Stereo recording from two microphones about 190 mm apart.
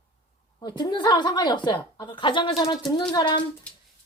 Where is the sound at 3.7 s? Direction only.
5° left (ahead or behind).